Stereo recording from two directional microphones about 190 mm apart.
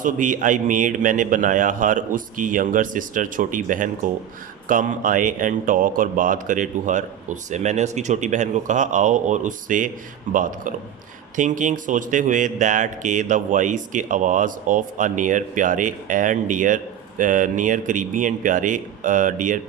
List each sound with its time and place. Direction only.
0.0 s speech: 45° right (ahead or behind)